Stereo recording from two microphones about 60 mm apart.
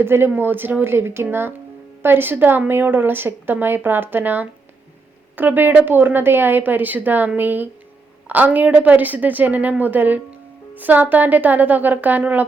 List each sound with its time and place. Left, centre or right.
0.0 s a woman's voice: right